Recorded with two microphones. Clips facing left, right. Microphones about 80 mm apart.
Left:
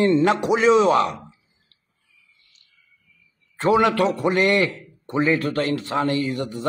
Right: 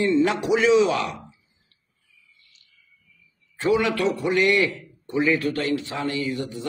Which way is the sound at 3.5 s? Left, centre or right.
Left.